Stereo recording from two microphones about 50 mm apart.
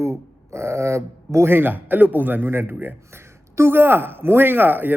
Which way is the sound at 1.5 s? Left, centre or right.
Right.